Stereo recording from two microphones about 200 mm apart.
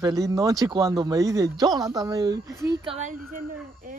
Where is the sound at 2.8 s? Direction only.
35° right (ahead or behind).